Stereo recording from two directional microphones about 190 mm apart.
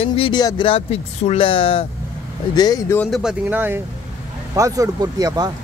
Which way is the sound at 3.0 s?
Centre (ahead or behind).